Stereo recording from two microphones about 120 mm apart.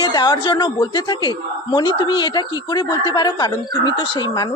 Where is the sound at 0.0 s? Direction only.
35° left (ahead or behind).